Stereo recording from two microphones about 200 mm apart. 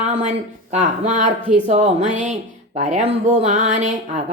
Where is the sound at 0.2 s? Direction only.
35° right (ahead or behind).